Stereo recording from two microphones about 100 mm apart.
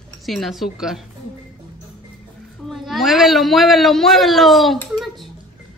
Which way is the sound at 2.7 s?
Centre (ahead or behind).